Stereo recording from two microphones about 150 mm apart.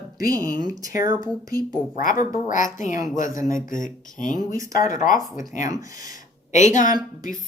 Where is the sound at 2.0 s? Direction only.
60° left (ahead or behind).